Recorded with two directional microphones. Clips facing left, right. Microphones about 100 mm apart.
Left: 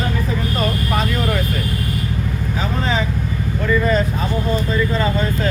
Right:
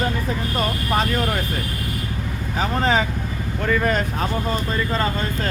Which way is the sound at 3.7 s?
65° right (ahead or behind).